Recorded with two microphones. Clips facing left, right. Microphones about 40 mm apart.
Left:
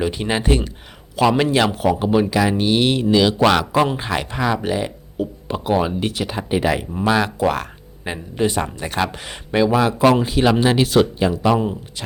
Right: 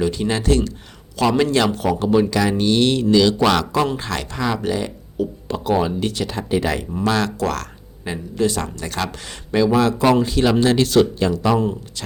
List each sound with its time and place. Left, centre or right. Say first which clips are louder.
0.0 s speech: even; left